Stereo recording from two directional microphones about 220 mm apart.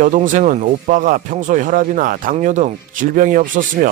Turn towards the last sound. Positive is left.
turn(degrees=-35)  # may be behind; listen again after turning